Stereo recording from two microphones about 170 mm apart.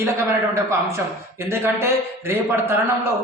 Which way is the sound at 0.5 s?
15° right (ahead or behind).